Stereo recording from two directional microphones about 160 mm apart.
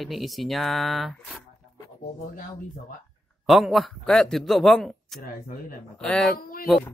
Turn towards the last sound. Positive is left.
turn(degrees=65)  # may be behind; listen again after turning